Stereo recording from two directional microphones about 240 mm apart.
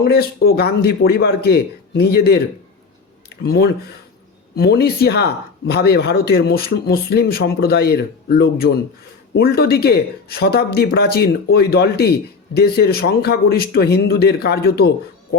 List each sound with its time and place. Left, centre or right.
0.0 s speech: left